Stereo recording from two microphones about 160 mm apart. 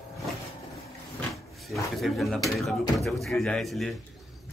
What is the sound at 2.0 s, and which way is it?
Speech, centre (ahead or behind).